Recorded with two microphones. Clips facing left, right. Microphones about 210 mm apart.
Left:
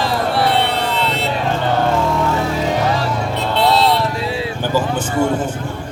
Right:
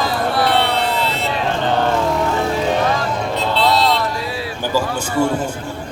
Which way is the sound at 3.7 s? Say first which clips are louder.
Left 2 dB; 30° left (ahead or behind).